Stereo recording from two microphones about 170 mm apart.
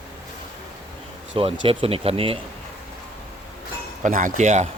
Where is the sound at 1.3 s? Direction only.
30° right (ahead or behind).